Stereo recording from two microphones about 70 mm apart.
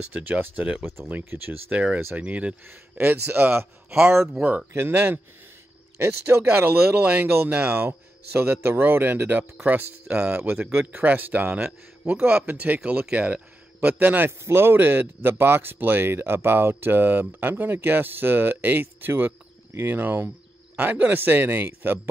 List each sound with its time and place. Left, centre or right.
0.1 s a man's voice: right